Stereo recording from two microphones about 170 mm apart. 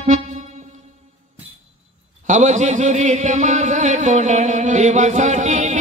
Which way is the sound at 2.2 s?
45° right (ahead or behind).